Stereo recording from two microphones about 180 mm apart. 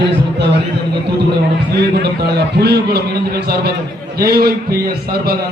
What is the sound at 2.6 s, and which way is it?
A man's voice, 65° right (ahead or behind).